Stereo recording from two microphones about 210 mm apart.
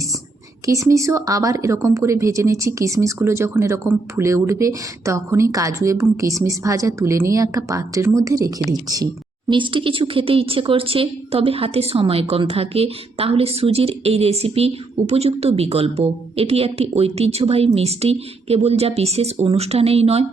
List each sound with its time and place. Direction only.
0.6 s speech: 15° right (ahead or behind)